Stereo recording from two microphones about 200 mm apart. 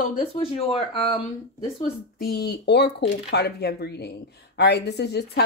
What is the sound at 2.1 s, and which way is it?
Speech, 50° left (ahead or behind).